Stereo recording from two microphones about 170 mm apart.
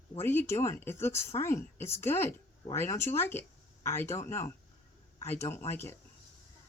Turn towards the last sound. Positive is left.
turn(degrees=15)  # may be behind; listen again after turning